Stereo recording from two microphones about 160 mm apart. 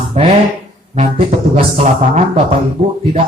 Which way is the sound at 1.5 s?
45° right (ahead or behind).